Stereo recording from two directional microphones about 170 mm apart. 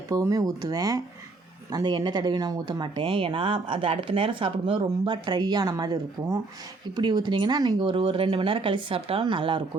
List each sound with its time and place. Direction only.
0.1 s speech: 20° right (ahead or behind)